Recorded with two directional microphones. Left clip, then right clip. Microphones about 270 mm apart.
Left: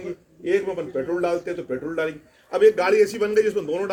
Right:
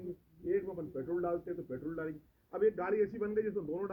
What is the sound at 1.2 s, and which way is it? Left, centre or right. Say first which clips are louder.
Speech: left 13 dB; left.